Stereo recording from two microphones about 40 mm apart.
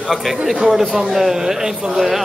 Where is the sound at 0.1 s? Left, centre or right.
Centre.